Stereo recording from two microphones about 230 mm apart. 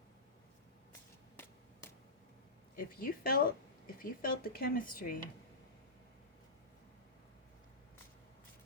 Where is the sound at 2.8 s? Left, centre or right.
Left.